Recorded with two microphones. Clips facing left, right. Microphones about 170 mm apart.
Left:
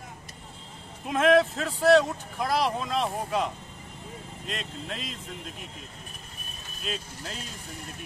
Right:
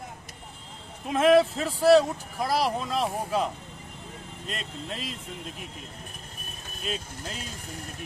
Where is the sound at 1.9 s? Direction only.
35° right (ahead or behind).